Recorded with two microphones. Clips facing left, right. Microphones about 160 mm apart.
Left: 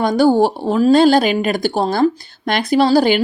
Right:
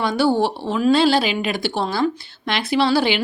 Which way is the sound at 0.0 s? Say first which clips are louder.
Left 5 dB; 40° left (ahead or behind).